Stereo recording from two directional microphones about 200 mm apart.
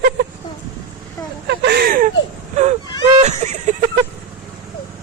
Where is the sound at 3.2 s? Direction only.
35° right (ahead or behind).